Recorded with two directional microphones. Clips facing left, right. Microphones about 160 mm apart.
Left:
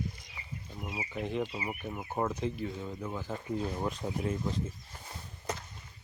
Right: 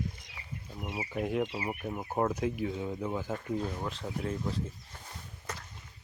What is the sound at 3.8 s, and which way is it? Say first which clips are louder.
Speech: left 2 dB; 15° left (ahead or behind).